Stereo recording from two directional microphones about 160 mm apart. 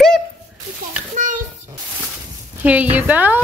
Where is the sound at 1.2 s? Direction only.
55° right (ahead or behind).